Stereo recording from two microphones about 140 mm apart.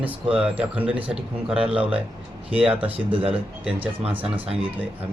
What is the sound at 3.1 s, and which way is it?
Speech, 40° right (ahead or behind).